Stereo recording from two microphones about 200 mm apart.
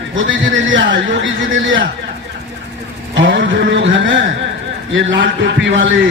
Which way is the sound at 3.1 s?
65° right (ahead or behind).